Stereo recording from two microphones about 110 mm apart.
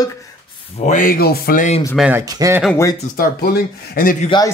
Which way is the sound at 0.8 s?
90° left.